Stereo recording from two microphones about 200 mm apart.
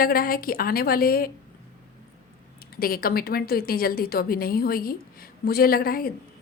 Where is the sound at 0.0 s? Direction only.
45° left (ahead or behind).